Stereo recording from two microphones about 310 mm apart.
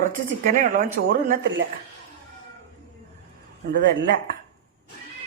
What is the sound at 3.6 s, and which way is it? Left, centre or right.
Speech, right.